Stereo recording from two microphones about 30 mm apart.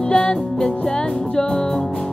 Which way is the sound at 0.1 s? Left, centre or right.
Left.